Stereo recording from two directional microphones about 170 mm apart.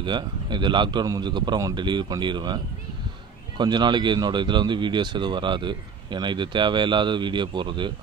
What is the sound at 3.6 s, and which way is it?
Speech, 25° right (ahead or behind).